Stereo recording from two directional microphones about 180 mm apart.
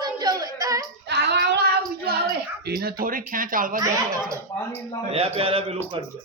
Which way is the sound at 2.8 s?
50° right (ahead or behind).